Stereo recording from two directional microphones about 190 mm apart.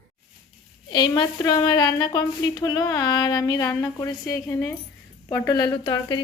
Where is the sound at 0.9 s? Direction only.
20° left (ahead or behind).